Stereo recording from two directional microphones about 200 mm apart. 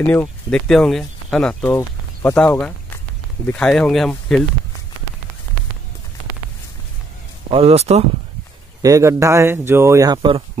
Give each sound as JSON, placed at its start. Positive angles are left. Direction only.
{"t": 0.0, "sound": "speech", "side_deg": 10}
{"t": 7.4, "sound": "speech", "side_deg": -30}
{"t": 8.8, "sound": "speech", "side_deg": -15}